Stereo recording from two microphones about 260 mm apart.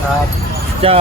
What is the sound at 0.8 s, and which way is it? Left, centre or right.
Speech, right.